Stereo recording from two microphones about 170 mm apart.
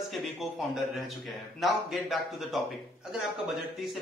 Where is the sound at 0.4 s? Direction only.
Centre (ahead or behind).